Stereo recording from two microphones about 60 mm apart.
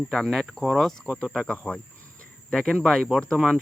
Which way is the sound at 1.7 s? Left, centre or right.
Centre.